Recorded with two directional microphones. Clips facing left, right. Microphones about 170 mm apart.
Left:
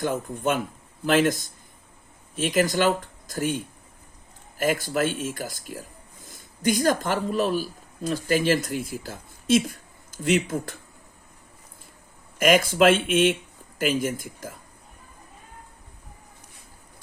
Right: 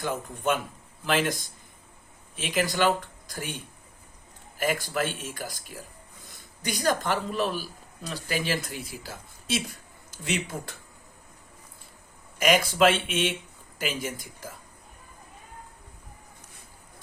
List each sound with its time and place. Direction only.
0.0 s speech: 50° left (ahead or behind)
12.4 s speech: 50° left (ahead or behind)